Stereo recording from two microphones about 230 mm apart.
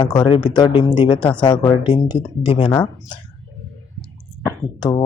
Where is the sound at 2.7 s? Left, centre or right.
Centre.